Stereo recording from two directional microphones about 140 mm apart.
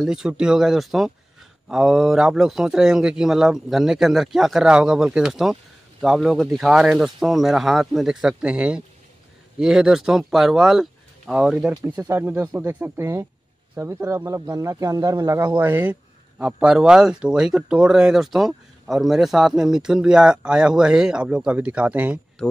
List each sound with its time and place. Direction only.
0.0 s speech: 5° right (ahead or behind)
11.7 s speech: 20° right (ahead or behind)